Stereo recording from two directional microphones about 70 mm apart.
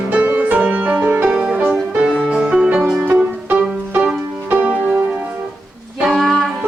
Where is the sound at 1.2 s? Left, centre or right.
Centre.